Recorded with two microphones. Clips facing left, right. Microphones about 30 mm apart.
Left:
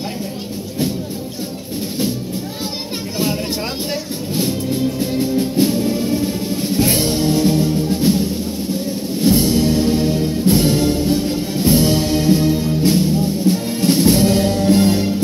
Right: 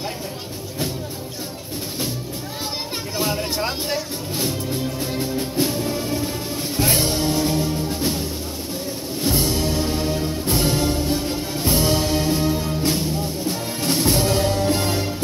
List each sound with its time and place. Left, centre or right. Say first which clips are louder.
5.8 s music: left 6 dB; centre
6.5 s music: left 4 dB; left
11.2 s music: left 6 dB; left
12.9 s music: left 7 dB; left; by 15.0 s centre